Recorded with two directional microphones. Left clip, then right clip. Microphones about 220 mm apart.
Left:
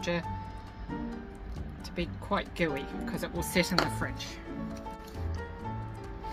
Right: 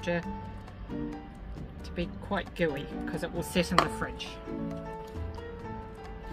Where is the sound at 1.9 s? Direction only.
15° right (ahead or behind).